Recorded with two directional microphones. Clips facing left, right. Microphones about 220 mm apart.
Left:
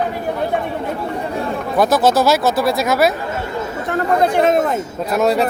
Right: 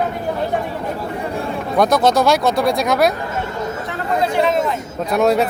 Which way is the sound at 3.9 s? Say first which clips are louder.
Left 6 dB; 50° left (ahead or behind).